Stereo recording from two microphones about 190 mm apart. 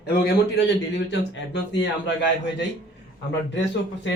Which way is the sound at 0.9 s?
75° left (ahead or behind).